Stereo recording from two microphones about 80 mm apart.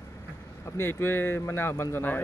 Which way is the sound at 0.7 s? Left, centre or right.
Left.